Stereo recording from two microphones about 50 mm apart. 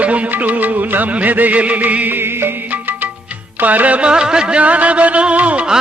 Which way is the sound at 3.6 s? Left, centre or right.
Right.